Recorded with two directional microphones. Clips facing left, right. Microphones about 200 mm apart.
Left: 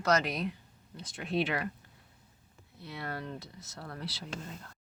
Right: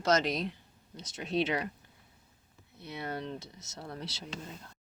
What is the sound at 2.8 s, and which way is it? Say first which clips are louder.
Speech: right 2 dB; 20° right (ahead or behind).